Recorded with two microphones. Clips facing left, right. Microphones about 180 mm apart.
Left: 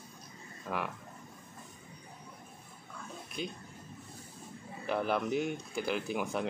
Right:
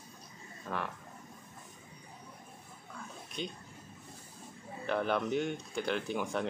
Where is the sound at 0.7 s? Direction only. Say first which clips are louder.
Left 1 dB; 10° left (ahead or behind).